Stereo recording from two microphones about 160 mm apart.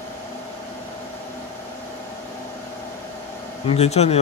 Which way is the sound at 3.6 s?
40° left (ahead or behind).